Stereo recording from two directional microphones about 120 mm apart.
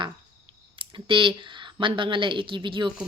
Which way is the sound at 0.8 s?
45° right (ahead or behind).